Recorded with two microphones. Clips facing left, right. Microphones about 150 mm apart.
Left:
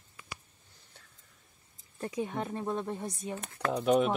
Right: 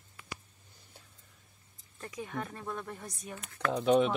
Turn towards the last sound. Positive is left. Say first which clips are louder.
# even
turn(degrees=5)  # may be behind; listen again after turning